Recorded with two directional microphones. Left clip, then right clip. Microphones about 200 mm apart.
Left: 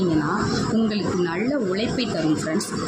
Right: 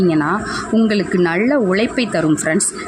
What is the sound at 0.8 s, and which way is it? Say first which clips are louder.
A woman's voice: right 8 dB; 55° right (ahead or behind).